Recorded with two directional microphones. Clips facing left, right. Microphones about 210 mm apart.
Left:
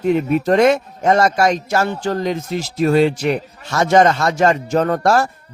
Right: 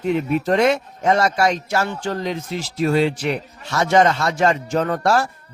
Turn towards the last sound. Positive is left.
turn(degrees=45)  # may be behind; listen again after turning